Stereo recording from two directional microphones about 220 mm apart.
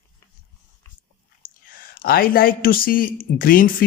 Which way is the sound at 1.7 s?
40° left (ahead or behind).